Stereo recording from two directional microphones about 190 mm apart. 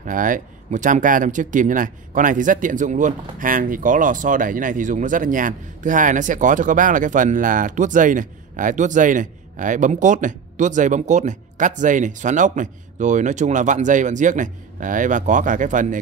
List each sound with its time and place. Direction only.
0.0 s speech: 45° right (ahead or behind)